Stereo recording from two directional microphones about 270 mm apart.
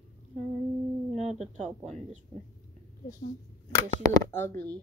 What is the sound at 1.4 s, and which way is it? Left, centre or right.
Speech, right.